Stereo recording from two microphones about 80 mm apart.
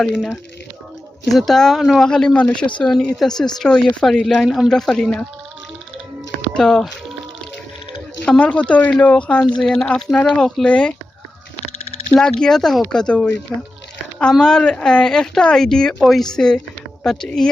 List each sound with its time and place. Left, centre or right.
0.0 s speech: centre
1.3 s speech: centre
6.5 s speech: centre
8.2 s speech: centre
12.1 s speech: centre